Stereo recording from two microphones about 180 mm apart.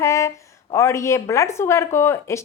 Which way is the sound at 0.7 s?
15° left (ahead or behind).